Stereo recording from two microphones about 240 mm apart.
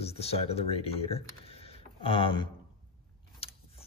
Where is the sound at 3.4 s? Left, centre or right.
Left.